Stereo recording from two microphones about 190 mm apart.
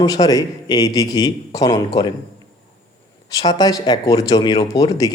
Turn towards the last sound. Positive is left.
turn(degrees=20)  # may be behind; listen again after turning